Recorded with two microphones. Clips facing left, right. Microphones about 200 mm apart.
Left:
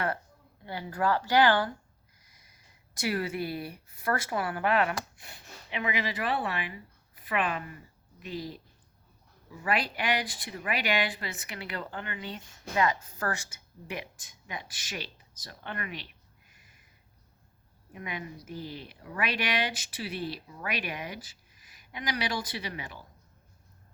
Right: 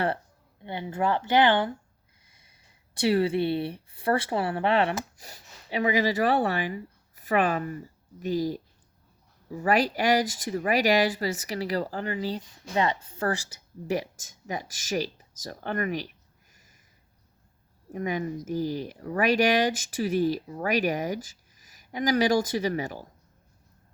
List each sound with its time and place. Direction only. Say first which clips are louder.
0.6 s speech: right 2 dB; 20° right (ahead or behind); by 16.7 s 40° right (ahead or behind)
17.9 s speech: right 10 dB; 45° right (ahead or behind)